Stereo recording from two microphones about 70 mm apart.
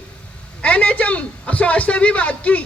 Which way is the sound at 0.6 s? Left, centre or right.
Centre.